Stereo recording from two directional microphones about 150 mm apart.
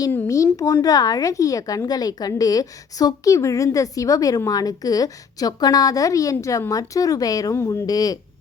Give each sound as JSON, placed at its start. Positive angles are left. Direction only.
{"t": 0.1, "sound": "speech", "side_deg": 15}